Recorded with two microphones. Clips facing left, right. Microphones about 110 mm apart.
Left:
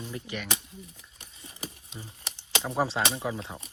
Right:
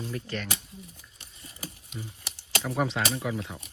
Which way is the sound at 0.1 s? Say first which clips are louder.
Right 2 dB; 15° left (ahead or behind).